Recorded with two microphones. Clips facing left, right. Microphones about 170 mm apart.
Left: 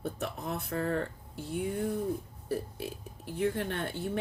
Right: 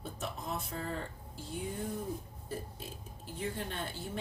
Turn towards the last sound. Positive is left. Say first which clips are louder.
# left 6 dB
turn(degrees=65)  # may be behind; listen again after turning